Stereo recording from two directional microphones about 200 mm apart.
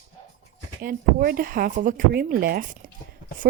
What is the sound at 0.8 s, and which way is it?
Speech, 45° right (ahead or behind).